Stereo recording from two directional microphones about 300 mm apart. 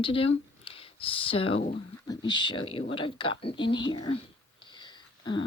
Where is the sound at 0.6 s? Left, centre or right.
Centre.